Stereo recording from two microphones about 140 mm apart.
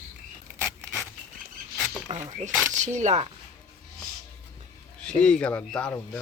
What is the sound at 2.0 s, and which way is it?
Speech, 55° right (ahead or behind).